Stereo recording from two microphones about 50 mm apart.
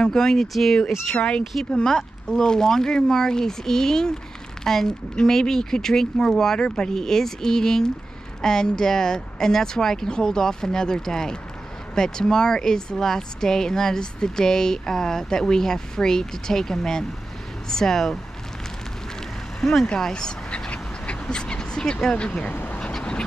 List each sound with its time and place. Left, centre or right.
0.0 s speech: centre
1.1 s speech: left
19.6 s speech: centre
20.0 s duck: centre
22.0 s speech: centre
22.5 s speech: left